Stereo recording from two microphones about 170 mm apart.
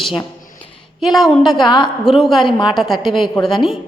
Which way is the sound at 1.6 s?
25° left (ahead or behind).